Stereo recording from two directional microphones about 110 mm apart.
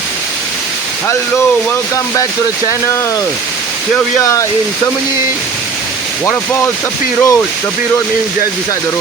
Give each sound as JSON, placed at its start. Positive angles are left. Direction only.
{"t": 2.6, "sound": "speech", "side_deg": 25}
{"t": 4.2, "sound": "speech", "side_deg": 30}
{"t": 6.2, "sound": "speech", "side_deg": 20}